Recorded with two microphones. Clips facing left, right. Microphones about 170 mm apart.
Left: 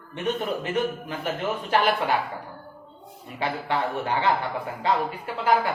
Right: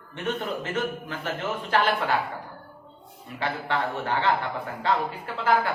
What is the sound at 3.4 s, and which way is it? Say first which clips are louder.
A man's voice: left 1 dB; 15° left (ahead or behind).